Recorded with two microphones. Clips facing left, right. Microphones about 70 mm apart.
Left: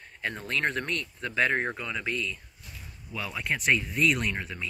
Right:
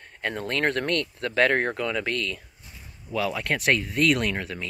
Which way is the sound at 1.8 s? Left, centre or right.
Right.